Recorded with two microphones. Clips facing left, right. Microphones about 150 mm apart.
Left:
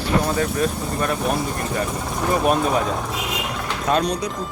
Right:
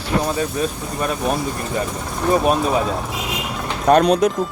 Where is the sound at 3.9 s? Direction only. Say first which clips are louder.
Right 8 dB; 65° right (ahead or behind).